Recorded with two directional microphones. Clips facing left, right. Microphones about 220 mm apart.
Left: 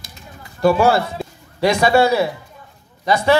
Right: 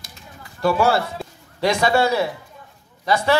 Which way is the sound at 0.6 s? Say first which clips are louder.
Left 4 dB; 15° left (ahead or behind).